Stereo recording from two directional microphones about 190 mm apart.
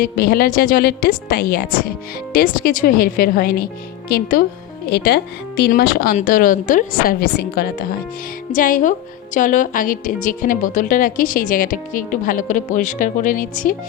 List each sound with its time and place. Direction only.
0.0 s a woman's voice: 50° left (ahead or behind)